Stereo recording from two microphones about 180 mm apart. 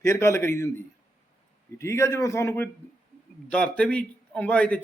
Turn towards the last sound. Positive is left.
turn(degrees=5)  # may be behind; listen again after turning